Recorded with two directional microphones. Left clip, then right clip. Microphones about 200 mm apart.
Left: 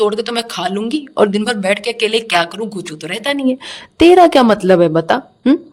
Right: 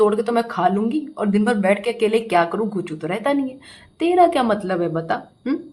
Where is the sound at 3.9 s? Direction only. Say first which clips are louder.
Left 8 dB; 50° left (ahead or behind).